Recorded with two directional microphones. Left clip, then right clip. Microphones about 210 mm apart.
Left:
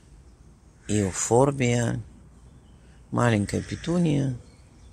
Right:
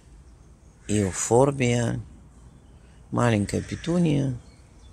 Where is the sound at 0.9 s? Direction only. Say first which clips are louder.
Right 1 dB; 5° right (ahead or behind).